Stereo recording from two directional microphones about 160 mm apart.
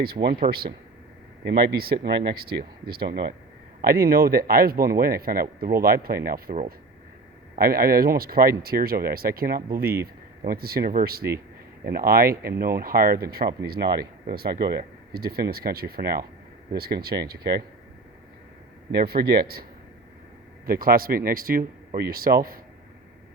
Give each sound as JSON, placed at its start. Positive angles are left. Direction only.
{"t": 0.0, "sound": "speech", "side_deg": -70}
{"t": 1.5, "sound": "a man's voice", "side_deg": -75}
{"t": 7.6, "sound": "speech", "side_deg": -65}
{"t": 13.8, "sound": "speech", "side_deg": -25}
{"t": 14.3, "sound": "speech", "side_deg": -70}
{"t": 18.9, "sound": "a man's voice", "side_deg": -80}
{"t": 20.7, "sound": "a man's voice", "side_deg": -65}